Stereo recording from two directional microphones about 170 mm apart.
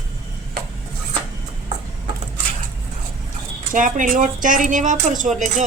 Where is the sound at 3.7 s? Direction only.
50° right (ahead or behind).